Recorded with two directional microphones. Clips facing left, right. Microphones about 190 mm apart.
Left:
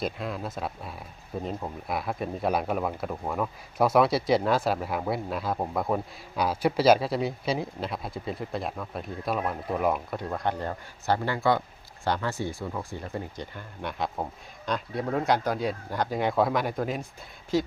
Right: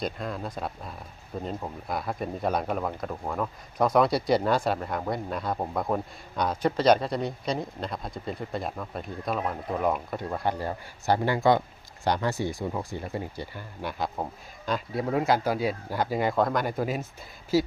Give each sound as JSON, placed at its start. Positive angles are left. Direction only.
{"t": 0.0, "sound": "speech", "side_deg": 5}